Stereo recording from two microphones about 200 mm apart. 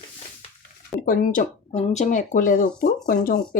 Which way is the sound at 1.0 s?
45° left (ahead or behind).